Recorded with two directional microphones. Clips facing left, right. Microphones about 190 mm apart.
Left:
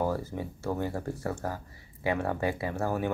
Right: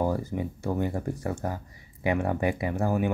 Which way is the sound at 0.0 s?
15° right (ahead or behind).